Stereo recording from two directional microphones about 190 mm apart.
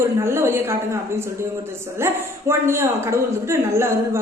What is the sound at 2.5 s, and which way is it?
A woman's voice, 15° right (ahead or behind).